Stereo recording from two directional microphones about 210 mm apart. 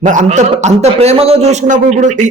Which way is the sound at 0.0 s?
35° right (ahead or behind).